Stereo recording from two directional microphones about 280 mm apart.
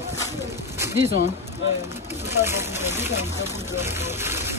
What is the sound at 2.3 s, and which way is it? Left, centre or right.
Speech, centre.